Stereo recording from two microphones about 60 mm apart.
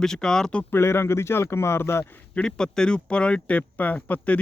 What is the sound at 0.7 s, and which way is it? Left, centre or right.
Speech, left.